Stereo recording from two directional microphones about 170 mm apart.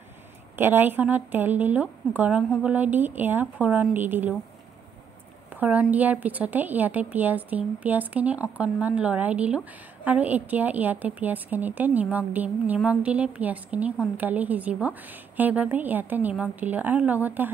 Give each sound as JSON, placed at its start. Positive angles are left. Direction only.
{"t": 0.6, "sound": "a woman's voice", "side_deg": -10}
{"t": 5.5, "sound": "a woman's voice", "side_deg": -10}